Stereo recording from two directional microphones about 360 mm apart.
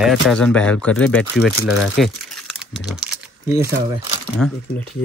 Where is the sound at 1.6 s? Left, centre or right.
Left.